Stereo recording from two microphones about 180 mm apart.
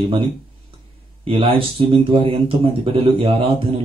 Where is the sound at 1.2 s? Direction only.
30° right (ahead or behind).